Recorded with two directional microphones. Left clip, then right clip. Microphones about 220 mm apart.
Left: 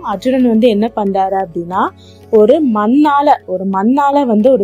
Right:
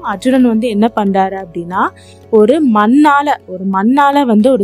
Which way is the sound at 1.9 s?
35° right (ahead or behind).